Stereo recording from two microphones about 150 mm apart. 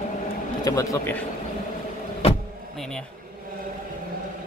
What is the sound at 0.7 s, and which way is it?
Speech, 20° left (ahead or behind).